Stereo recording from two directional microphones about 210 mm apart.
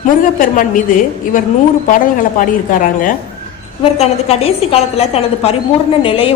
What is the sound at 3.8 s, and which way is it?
Speech, 30° left (ahead or behind).